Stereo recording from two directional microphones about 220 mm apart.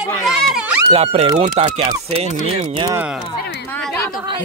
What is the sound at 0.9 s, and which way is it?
Speech, 25° right (ahead or behind).